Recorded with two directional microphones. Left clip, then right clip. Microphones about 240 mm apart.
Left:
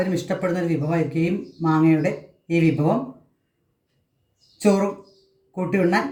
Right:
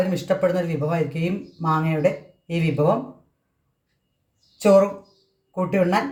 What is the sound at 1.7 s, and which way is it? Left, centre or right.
Speech, right.